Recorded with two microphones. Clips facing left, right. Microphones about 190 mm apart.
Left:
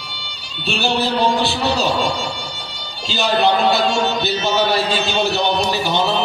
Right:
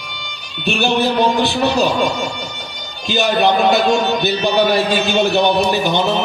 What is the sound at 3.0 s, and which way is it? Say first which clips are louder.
A man's voice: right 2 dB; 55° right (ahead or behind).